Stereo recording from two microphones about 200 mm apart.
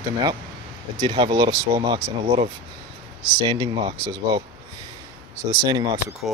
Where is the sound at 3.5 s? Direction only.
20° right (ahead or behind).